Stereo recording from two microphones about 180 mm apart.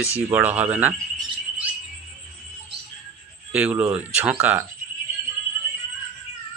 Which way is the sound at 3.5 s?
10° right (ahead or behind).